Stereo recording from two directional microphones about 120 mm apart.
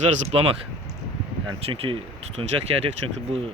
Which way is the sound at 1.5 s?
50° right (ahead or behind).